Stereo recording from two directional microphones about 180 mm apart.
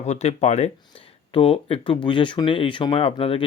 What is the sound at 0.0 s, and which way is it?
Speech, 35° left (ahead or behind).